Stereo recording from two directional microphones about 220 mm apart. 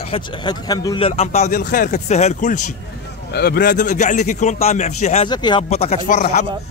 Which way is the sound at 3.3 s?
45° left (ahead or behind).